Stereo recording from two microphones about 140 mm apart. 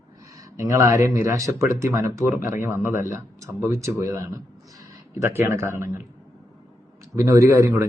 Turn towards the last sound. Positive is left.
turn(degrees=-20)  # may be behind; listen again after turning